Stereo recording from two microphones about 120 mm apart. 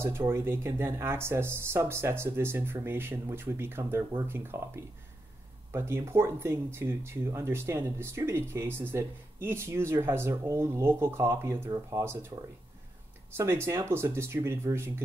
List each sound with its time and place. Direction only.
0.0 s speech: 20° right (ahead or behind)
13.4 s speech: 20° right (ahead or behind)